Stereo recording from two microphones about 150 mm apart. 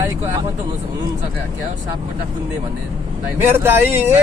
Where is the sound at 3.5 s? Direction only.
15° right (ahead or behind).